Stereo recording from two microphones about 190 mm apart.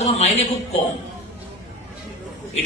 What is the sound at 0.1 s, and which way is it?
Speech, 35° left (ahead or behind).